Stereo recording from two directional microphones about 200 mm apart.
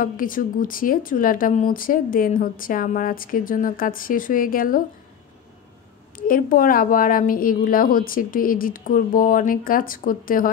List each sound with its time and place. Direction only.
0.0 s a woman's voice: 45° left (ahead or behind)
6.1 s a woman's voice: 45° left (ahead or behind)